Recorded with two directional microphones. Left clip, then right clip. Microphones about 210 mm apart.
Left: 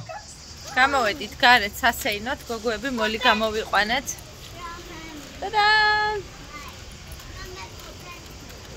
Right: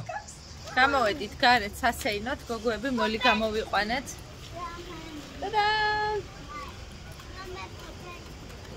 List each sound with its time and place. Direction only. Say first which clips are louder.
0.7 s a woman's voice: left 3 dB; centre (ahead or behind)
5.4 s child singing: left 7 dB; 20° left (ahead or behind)